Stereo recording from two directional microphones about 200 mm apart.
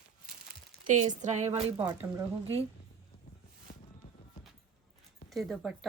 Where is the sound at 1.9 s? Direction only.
15° right (ahead or behind).